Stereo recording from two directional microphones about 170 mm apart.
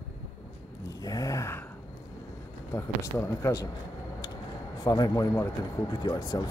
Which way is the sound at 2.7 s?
15° left (ahead or behind).